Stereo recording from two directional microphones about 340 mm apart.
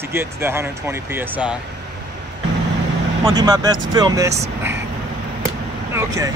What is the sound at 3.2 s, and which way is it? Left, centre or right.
Speech, centre.